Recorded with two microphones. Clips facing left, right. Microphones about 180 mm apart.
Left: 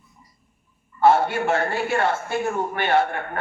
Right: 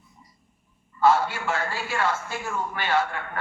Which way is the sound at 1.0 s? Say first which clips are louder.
Left 4 dB; 55° left (ahead or behind).